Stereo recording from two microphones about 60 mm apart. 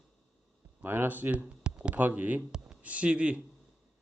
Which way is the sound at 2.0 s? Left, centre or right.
Right.